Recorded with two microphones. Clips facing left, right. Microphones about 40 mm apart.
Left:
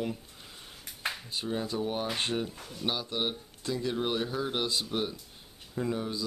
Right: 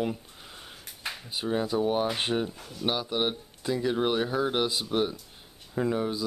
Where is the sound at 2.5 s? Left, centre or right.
Centre.